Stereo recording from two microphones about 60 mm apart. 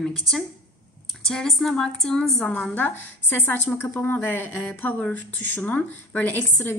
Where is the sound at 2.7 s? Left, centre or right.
Left.